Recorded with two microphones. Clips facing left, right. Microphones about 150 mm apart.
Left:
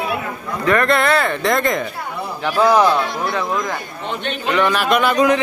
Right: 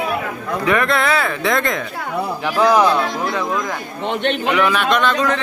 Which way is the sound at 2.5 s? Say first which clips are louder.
Even; 20° left (ahead or behind).